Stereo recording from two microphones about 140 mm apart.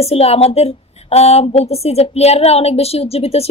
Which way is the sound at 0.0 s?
45° left (ahead or behind).